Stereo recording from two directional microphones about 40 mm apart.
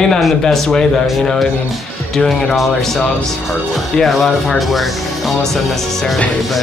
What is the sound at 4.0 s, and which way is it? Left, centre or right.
Speech, centre.